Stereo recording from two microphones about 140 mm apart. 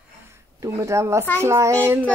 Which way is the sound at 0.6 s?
20° right (ahead or behind).